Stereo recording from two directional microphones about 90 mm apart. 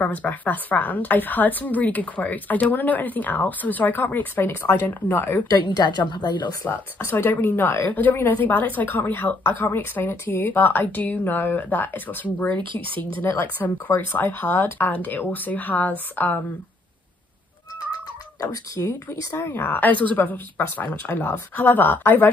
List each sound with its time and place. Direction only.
0.0 s speech: 20° left (ahead or behind)
5.5 s a woman's voice: 50° left (ahead or behind)
6.6 s speech: 25° left (ahead or behind)
12.5 s speech: 70° right (ahead or behind)
13.2 s speech: 25° left (ahead or behind)
18.8 s speech: 25° left (ahead or behind)